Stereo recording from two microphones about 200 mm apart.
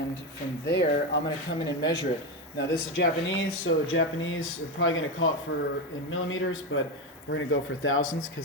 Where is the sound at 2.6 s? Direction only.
60° left (ahead or behind); by 8.0 s 80° left.